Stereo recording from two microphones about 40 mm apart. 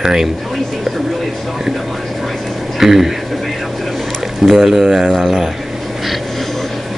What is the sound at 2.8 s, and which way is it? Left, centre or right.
Speech, centre.